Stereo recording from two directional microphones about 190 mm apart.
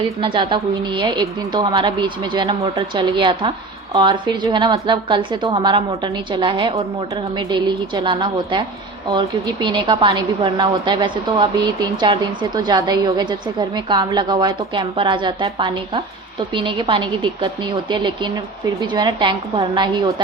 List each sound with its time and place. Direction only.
0.2 s a woman's voice: 25° right (ahead or behind)